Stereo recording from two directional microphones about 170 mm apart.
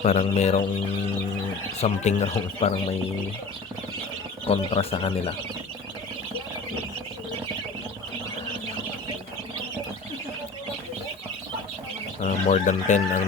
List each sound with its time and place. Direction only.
0.0 s speech: 40° left (ahead or behind)
1.8 s speech: 40° left (ahead or behind)
4.4 s speech: 35° left (ahead or behind)
12.2 s speech: 45° left (ahead or behind)